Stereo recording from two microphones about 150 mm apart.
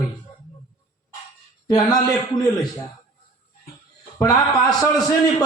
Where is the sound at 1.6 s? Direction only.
25° left (ahead or behind).